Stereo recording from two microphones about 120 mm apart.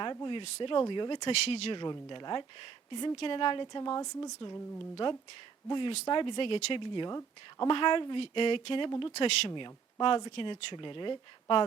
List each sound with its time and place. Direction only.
0.0 s speech: 40° left (ahead or behind)
1.5 s speech: 60° left (ahead or behind)
1.7 s speech: 40° left (ahead or behind)
4.8 s speech: 45° left (ahead or behind)